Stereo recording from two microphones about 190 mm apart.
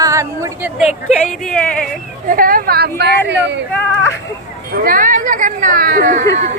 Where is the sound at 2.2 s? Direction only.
50° right (ahead or behind); by 3.6 s 65° right (ahead or behind).